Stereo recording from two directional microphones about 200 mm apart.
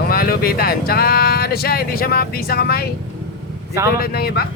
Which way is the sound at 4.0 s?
50° left (ahead or behind).